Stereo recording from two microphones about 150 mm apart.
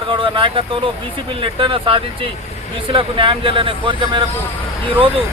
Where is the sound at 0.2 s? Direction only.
35° right (ahead or behind).